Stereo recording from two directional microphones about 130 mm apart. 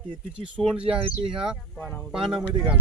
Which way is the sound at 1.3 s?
5° right (ahead or behind).